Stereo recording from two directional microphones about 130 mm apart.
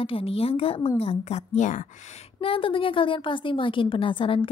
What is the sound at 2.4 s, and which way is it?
A woman's voice, 45° left (ahead or behind).